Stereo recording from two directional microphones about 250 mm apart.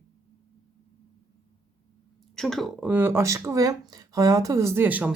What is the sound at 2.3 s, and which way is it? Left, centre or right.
Speech, centre.